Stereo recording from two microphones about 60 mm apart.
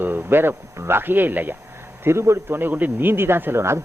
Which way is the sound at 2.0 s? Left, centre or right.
Right.